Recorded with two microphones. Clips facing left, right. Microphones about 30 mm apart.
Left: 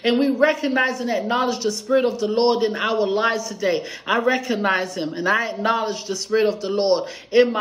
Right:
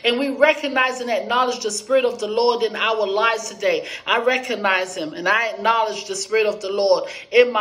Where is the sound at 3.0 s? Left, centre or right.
Centre.